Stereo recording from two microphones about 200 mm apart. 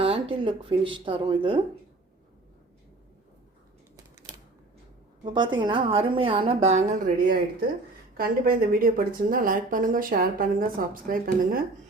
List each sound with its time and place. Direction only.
0.0 s speech: 30° right (ahead or behind)
5.2 s a woman's voice: 25° right (ahead or behind); by 11.6 s 45° right (ahead or behind)